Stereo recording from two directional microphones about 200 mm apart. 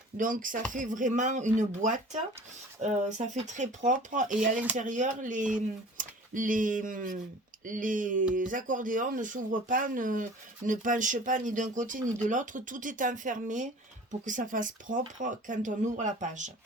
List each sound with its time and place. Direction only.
0.2 s speech: 40° right (ahead or behind)